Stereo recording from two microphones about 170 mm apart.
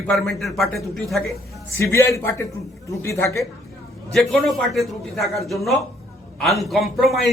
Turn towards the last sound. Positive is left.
turn(degrees=0)  # may be behind; listen again after turning